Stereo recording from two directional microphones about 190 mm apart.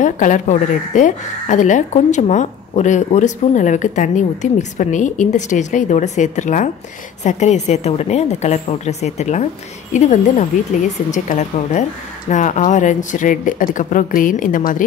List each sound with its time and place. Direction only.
0.0 s speech: 40° left (ahead or behind)